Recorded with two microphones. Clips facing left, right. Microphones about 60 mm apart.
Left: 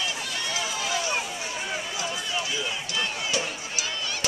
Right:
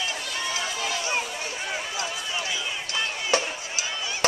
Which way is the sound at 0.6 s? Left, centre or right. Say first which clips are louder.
Even; centre.